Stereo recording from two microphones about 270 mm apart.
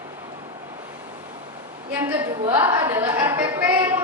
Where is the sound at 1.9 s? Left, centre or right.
Centre.